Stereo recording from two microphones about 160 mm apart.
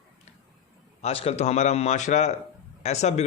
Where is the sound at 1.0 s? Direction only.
40° left (ahead or behind).